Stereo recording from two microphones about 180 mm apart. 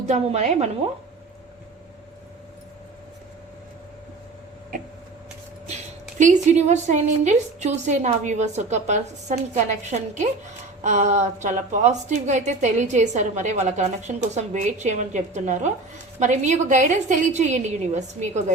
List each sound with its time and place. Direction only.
0.1 s a woman's voice: 35° right (ahead or behind)
4.7 s a sound: 50° right (ahead or behind)
5.6 s a woman's voice: 40° right (ahead or behind)